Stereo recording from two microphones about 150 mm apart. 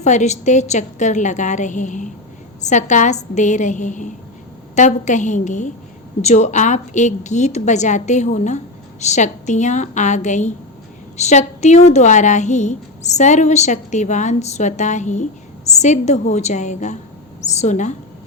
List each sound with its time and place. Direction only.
0.0 s a woman's voice: 50° left (ahead or behind)